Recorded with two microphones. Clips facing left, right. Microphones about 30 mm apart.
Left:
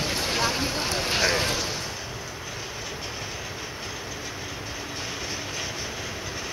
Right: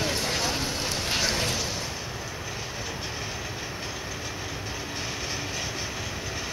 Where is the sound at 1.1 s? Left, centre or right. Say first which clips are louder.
Left 3 dB; centre.